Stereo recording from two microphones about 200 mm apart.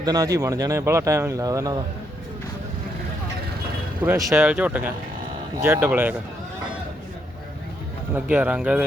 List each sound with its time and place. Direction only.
0.0 s speech: 20° right (ahead or behind)
4.0 s speech: 10° right (ahead or behind)
8.1 s speech: 10° right (ahead or behind)